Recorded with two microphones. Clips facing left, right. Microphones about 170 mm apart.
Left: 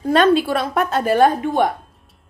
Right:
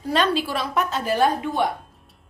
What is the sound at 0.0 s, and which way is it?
A woman's voice, 50° left (ahead or behind).